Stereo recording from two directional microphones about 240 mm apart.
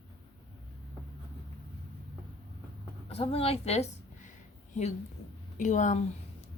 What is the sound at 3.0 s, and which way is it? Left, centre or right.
A woman's voice, left.